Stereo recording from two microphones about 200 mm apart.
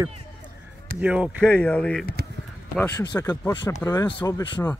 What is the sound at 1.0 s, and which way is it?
Speech, 5° right (ahead or behind).